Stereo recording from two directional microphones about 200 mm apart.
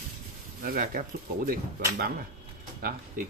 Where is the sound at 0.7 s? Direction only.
45° right (ahead or behind).